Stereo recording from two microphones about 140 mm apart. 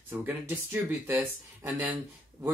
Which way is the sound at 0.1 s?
15° right (ahead or behind).